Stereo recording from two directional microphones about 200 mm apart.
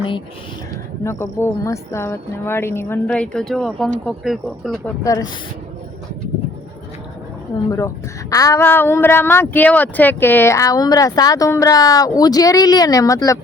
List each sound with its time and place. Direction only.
1.0 s speech: 10° left (ahead or behind)
5.0 s speech: 15° left (ahead or behind)
7.7 s speech: 15° left (ahead or behind)